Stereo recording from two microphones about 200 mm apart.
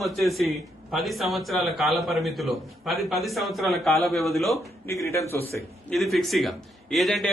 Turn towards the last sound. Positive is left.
turn(degrees=0)  # may be behind; listen again after turning